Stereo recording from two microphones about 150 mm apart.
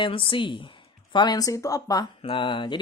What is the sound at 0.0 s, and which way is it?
Speech, 35° left (ahead or behind).